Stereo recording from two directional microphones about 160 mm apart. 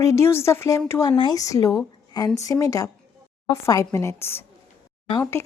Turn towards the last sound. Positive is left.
turn(degrees=15)  # may be behind; listen again after turning